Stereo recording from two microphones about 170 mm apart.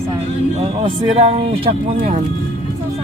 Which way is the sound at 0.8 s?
30° right (ahead or behind).